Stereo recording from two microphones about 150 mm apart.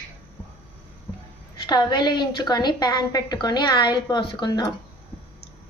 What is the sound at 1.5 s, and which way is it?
A woman's voice, 30° left (ahead or behind).